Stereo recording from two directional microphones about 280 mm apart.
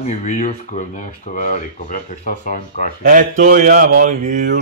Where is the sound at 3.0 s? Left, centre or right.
Right.